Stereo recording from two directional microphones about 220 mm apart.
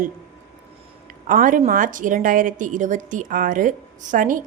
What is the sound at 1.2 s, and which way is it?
A woman's voice, 40° right (ahead or behind).